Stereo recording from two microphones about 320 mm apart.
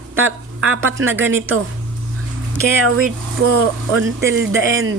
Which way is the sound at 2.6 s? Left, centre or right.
Right.